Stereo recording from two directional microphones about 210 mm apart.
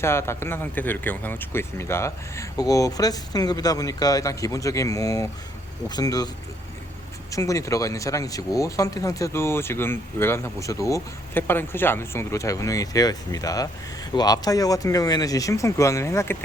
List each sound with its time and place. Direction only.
0.0 s speech: 10° left (ahead or behind)